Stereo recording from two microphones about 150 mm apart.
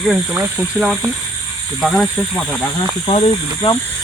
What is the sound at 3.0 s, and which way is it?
Speech, 40° left (ahead or behind).